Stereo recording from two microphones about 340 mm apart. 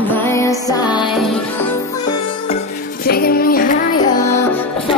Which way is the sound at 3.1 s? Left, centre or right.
Left.